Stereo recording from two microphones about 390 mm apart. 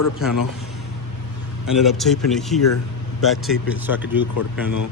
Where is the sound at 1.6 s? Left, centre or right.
Centre.